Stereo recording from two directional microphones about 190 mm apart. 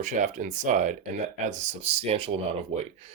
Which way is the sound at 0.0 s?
40° right (ahead or behind).